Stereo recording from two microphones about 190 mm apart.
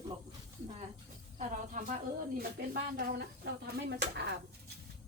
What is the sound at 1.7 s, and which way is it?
Speech, 45° right (ahead or behind).